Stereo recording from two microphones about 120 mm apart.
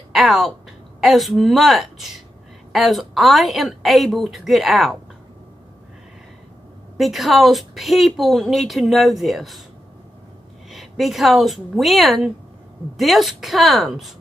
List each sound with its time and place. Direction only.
0.1 s a woman's voice: centre (ahead or behind)
7.0 s a woman's voice: centre (ahead or behind)
10.7 s a woman's voice: centre (ahead or behind)